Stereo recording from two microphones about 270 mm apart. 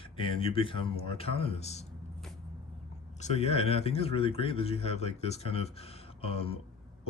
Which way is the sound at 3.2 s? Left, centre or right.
Left.